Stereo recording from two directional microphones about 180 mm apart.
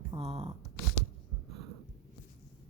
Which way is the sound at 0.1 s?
35° right (ahead or behind).